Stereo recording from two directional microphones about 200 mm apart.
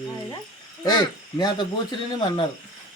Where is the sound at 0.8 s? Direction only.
20° left (ahead or behind).